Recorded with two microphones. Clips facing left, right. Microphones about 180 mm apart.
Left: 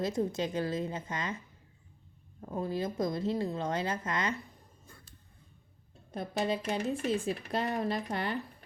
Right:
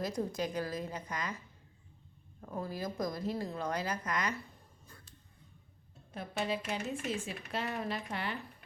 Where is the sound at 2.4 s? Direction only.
25° left (ahead or behind).